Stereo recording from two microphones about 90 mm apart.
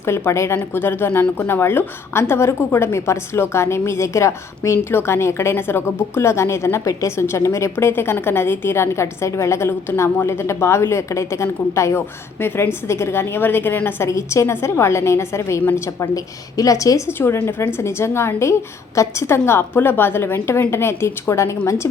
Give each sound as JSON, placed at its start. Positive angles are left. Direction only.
{"t": 0.0, "sound": "speech", "side_deg": 30}
{"t": 14.1, "sound": "a woman's voice", "side_deg": 35}
{"t": 16.1, "sound": "a woman's voice", "side_deg": 40}